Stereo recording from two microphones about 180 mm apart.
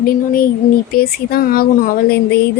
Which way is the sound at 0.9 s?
55° left (ahead or behind).